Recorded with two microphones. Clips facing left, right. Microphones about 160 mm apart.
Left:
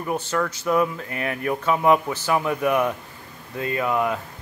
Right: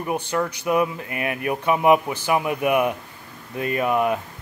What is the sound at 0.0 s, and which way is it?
Speech, 15° right (ahead or behind).